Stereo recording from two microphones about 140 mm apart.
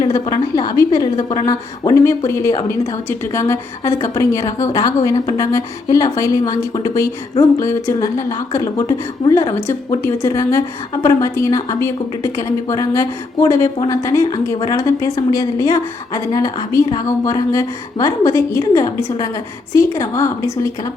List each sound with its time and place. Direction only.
0.0 s a woman's voice: 25° left (ahead or behind)